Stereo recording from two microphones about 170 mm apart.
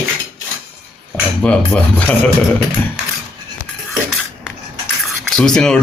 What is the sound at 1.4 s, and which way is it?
Dishes, 5° left (ahead or behind).